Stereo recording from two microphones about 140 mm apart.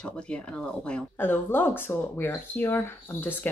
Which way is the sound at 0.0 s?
5° left (ahead or behind).